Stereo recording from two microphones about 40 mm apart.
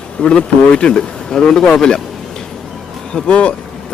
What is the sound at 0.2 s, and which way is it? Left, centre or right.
Speech, left.